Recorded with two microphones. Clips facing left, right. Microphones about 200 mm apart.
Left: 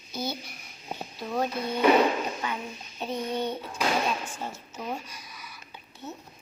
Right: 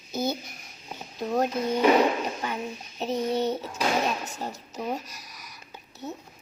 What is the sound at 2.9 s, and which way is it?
Child singing, 40° right (ahead or behind).